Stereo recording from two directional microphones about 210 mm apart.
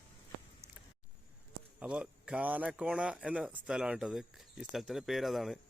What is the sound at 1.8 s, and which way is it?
Speech, 5° right (ahead or behind).